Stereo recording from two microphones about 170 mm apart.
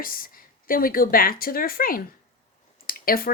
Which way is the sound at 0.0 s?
55° left (ahead or behind).